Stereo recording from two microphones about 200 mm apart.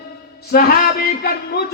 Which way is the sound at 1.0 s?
50° left (ahead or behind).